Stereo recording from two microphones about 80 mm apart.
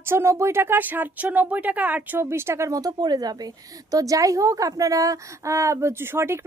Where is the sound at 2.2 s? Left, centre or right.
Right.